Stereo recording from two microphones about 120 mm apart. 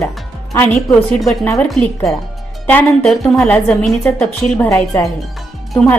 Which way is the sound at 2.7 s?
10° left (ahead or behind).